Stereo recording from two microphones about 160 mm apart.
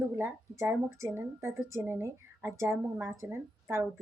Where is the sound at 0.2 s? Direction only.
15° right (ahead or behind).